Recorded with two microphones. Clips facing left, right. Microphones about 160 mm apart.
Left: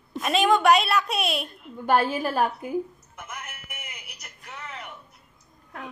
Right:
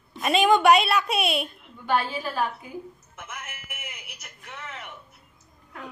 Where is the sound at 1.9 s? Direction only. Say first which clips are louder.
Left 4 dB; 50° left (ahead or behind).